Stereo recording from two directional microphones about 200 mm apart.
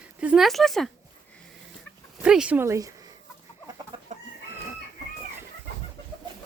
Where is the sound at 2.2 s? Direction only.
5° right (ahead or behind).